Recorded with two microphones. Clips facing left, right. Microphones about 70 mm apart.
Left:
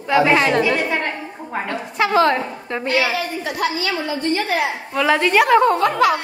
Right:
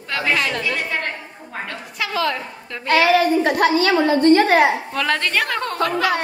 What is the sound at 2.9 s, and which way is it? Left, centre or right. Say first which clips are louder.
A woman's voice: right 6 dB; right.